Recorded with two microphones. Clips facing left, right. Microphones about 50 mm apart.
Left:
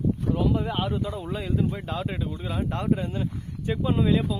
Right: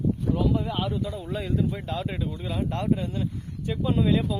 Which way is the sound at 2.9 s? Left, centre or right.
Left.